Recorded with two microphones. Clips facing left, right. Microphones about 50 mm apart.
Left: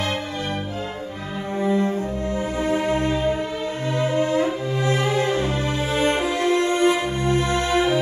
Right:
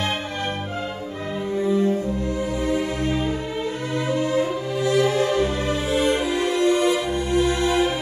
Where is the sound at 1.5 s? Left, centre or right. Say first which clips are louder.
Right 1 dB; left.